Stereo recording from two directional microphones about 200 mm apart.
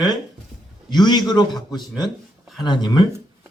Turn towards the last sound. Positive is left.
turn(degrees=20)  # may be behind; listen again after turning